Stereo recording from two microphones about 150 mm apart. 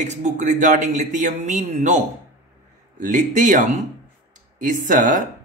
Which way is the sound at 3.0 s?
55° right (ahead or behind).